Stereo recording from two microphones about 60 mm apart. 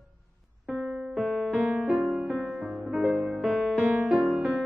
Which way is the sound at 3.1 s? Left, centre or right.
Centre.